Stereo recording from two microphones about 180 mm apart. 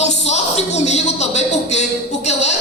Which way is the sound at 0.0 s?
40° left (ahead or behind).